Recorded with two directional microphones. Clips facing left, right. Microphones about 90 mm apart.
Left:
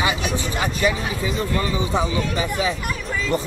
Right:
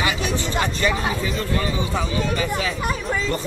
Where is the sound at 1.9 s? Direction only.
20° left (ahead or behind).